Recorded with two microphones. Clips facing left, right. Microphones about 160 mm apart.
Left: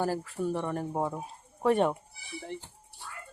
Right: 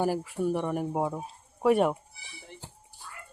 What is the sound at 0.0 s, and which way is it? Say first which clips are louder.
Speech: right 3 dB; 15° right (ahead or behind).